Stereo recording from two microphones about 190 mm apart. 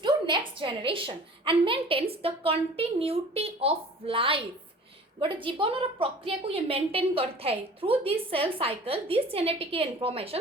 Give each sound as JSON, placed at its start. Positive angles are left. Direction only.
{"t": 0.0, "sound": "a woman's voice", "side_deg": -25}